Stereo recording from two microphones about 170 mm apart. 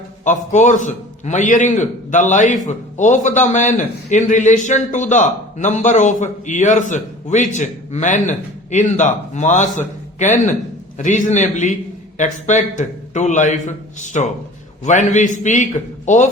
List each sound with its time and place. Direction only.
0.3 s a man's voice: 45° left (ahead or behind)